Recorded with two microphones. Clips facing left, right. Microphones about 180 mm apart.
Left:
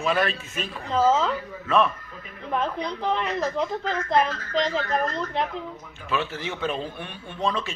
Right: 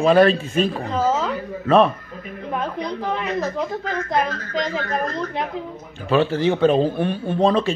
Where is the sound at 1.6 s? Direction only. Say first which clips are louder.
Right 7 dB; 35° right (ahead or behind).